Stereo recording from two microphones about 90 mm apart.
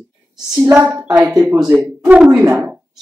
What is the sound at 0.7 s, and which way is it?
Speech, 20° right (ahead or behind).